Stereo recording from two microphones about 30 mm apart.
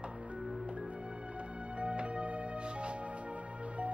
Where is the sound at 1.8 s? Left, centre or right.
Right.